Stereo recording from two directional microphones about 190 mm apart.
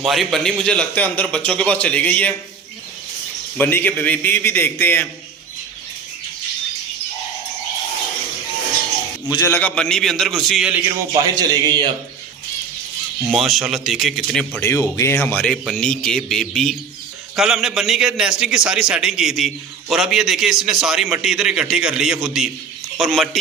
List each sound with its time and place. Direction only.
0.0 s a man's voice: centre (ahead or behind)
3.6 s a man's voice: 10° left (ahead or behind)
9.3 s a man's voice: 15° left (ahead or behind); by 10.8 s centre (ahead or behind)
11.1 s a man's voice: 20° right (ahead or behind)
13.3 s a man's voice: centre (ahead or behind)
14.6 s a man's voice: 15° left (ahead or behind); by 23.4 s centre (ahead or behind)